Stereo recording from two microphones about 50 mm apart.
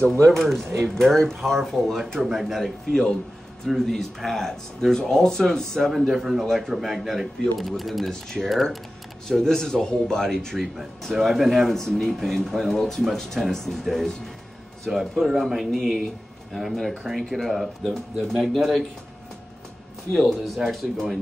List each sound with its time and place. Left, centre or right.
0.3 s speech: centre
2.2 s speech: centre
2.6 s speech: centre
10.6 s speech: centre
20.1 s speech: centre